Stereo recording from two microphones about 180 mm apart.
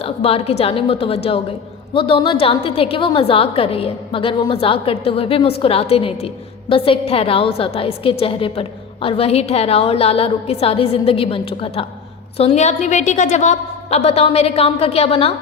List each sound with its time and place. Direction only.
0.0 s a woman's voice: 35° left (ahead or behind)